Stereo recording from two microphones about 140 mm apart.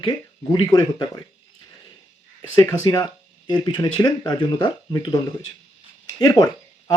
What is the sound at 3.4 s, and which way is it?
Speech, 30° left (ahead or behind).